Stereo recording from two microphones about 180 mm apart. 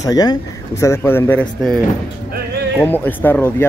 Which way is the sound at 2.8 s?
10° left (ahead or behind).